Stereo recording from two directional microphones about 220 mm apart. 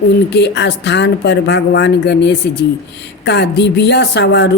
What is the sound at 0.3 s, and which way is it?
Speech, 50° left (ahead or behind).